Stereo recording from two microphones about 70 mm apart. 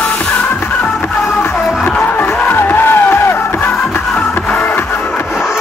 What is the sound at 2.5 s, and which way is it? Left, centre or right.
Music, left.